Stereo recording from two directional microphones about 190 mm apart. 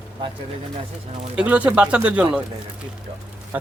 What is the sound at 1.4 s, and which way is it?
Speech, 5° right (ahead or behind).